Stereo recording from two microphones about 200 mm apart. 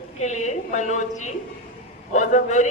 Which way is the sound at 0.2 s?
35° left (ahead or behind).